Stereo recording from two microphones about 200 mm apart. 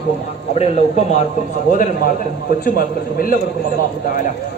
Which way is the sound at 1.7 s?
45° left (ahead or behind).